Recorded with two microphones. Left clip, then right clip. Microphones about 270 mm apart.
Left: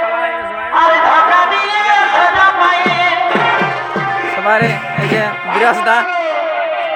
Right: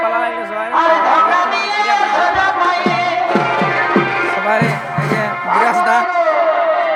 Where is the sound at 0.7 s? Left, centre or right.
Centre.